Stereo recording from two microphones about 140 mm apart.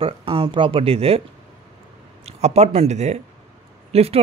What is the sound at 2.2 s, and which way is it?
A man's voice, 50° right (ahead or behind).